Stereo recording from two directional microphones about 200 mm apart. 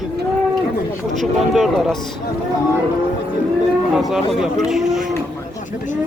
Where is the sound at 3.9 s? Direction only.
Centre (ahead or behind).